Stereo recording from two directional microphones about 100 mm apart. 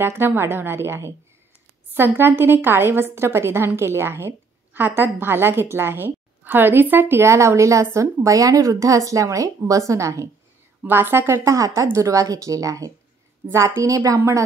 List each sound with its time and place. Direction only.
0.0 s a woman's voice: 20° right (ahead or behind)
10.8 s a woman's voice: 20° right (ahead or behind)